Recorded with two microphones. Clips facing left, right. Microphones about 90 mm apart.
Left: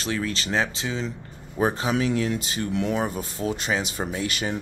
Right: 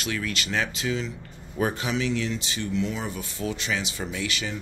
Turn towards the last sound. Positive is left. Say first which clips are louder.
# left 3 dB
turn(degrees=45)  # may be behind; listen again after turning